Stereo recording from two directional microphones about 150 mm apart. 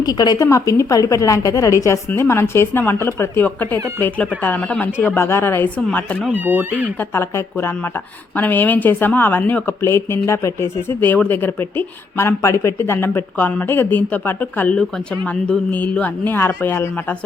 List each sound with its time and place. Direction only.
0.0 s a woman's voice: 25° left (ahead or behind); by 6.2 s 10° left (ahead or behind)
6.2 s speech: 10° right (ahead or behind)
7.0 s a woman's voice: 15° left (ahead or behind)